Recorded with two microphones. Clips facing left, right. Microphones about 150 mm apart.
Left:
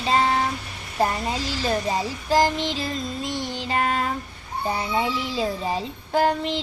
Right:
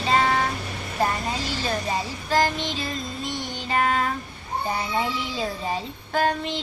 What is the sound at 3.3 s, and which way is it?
Music, 30° left (ahead or behind).